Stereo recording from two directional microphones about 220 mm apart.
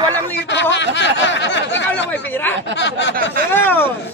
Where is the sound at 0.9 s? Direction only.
55° left (ahead or behind).